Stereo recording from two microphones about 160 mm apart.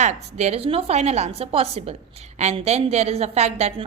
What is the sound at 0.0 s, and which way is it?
A woman's voice, 45° right (ahead or behind).